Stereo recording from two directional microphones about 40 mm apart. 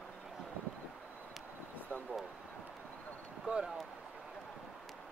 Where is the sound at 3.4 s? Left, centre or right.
Centre.